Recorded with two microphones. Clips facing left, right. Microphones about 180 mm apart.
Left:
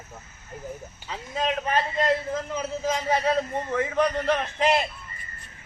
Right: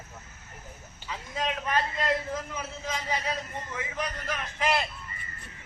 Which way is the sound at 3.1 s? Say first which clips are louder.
Left 10 dB; 55° left (ahead or behind).